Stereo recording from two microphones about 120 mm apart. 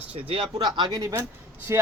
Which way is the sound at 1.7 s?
25° right (ahead or behind).